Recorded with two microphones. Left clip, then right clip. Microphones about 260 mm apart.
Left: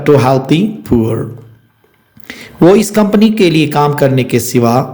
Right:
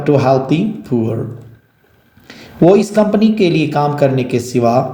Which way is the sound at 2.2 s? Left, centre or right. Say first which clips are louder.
Left 7 dB; left.